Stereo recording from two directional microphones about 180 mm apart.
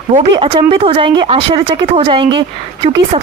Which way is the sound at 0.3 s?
25° right (ahead or behind).